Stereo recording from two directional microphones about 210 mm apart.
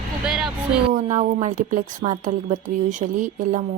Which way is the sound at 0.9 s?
35° right (ahead or behind).